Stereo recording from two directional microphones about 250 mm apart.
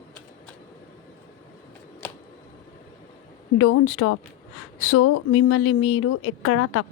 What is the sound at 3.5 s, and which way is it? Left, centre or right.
A woman's voice, left.